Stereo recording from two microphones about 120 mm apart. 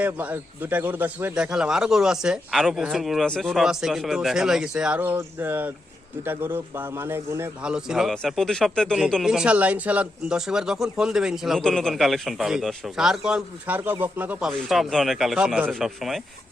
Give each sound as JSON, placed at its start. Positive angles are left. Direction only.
{"t": 0.0, "sound": "a man's voice", "side_deg": -15}
{"t": 7.6, "sound": "a man's voice", "side_deg": -5}
{"t": 14.5, "sound": "speech", "side_deg": 0}